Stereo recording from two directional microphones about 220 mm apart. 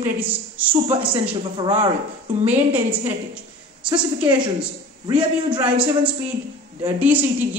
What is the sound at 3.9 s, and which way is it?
A man's voice, 20° right (ahead or behind).